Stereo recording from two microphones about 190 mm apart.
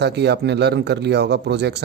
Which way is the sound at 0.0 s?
60° right (ahead or behind).